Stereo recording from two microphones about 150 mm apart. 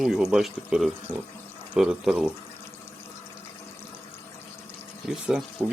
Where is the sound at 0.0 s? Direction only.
Centre (ahead or behind).